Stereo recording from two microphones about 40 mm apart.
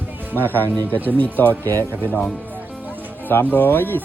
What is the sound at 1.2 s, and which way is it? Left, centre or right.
Speech, left.